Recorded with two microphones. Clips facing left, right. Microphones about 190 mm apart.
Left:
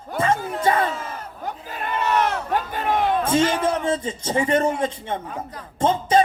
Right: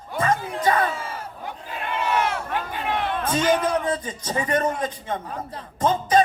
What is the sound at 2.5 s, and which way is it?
Crowd, 45° left (ahead or behind).